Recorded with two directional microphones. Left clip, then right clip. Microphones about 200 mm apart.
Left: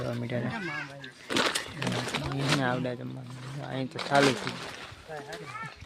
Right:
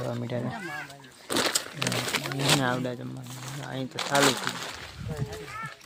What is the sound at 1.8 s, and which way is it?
Speech, 45° right (ahead or behind).